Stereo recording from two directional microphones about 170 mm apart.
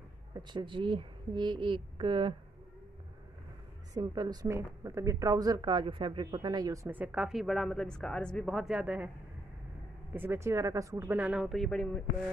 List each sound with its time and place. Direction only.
0.3 s a woman's voice: 25° right (ahead or behind)
3.9 s speech: 25° right (ahead or behind); by 9.1 s 5° right (ahead or behind)
10.1 s speech: 15° right (ahead or behind); by 12.3 s 5° left (ahead or behind)